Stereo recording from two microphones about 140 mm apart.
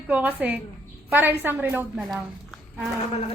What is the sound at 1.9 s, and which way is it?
Speech, 5° right (ahead or behind).